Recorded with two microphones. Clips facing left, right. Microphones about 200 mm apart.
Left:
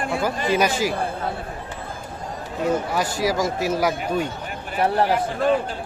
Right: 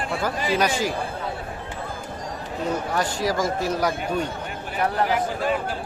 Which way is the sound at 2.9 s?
10° left (ahead or behind).